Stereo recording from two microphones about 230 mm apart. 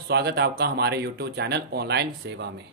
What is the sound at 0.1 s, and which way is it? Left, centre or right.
Speech, right.